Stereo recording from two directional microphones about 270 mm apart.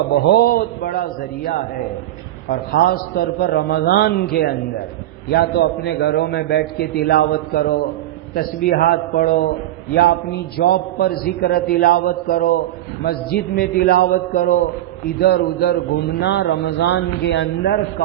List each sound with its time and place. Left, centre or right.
0.3 s a man's voice: left
2.5 s a man's voice: left